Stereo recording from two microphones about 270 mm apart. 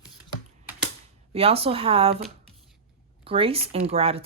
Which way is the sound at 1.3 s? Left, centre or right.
Right.